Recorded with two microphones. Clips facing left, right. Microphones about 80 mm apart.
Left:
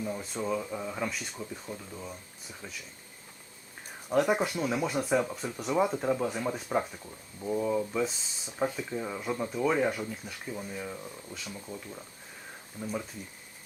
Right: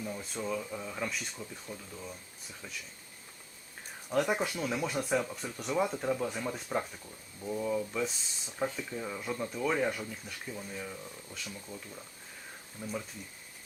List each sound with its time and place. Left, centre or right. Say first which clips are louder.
0.2 s speech: left 3 dB; centre
0.5 s speech: left 4 dB; centre
1.4 s speech: left 4 dB; centre
4.1 s speech: left 4 dB; centre
12.8 s speech: left 3 dB; centre